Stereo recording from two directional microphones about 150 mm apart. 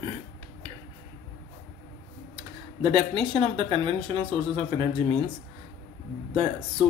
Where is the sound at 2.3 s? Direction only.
35° right (ahead or behind).